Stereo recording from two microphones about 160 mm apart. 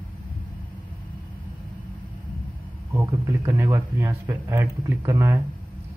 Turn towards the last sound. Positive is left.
turn(degrees=-15)  # may be behind; listen again after turning